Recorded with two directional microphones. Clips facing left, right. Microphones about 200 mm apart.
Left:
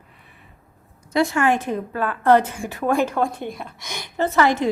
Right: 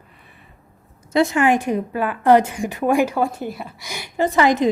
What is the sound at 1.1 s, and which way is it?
A woman's voice, 20° right (ahead or behind).